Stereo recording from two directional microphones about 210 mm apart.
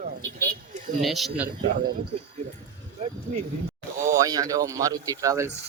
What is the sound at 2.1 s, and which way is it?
Speech, 30° right (ahead or behind).